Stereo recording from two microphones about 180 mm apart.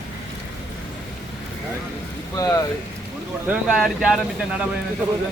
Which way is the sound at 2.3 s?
20° left (ahead or behind).